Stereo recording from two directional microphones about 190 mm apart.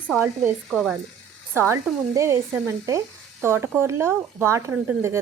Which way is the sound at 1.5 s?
15° right (ahead or behind).